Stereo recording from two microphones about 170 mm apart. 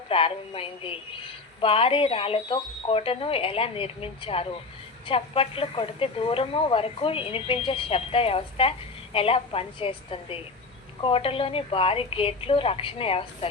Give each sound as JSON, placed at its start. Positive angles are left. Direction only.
{"t": 0.1, "sound": "speech", "side_deg": 35}